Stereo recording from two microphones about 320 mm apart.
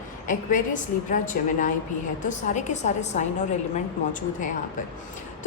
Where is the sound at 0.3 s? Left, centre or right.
Left.